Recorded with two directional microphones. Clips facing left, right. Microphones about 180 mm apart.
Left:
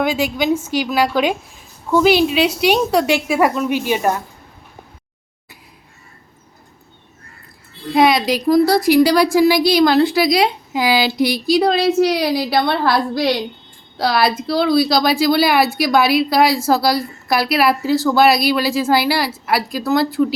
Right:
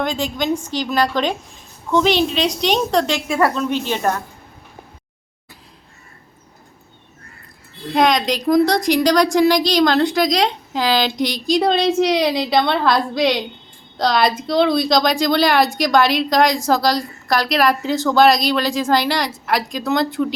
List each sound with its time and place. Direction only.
0.0 s a woman's voice: 10° left (ahead or behind)
7.9 s a woman's voice: 5° left (ahead or behind)
13.1 s a child's voice: 20° right (ahead or behind)
13.9 s a woman's voice: 5° left (ahead or behind)